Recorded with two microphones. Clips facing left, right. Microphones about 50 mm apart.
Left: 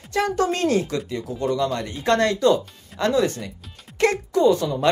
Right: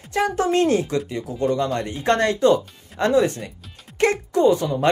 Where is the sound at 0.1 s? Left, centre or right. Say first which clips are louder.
Right 2 dB; right.